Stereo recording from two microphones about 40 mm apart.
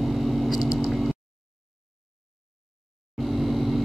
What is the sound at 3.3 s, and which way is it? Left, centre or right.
Vehicle, centre.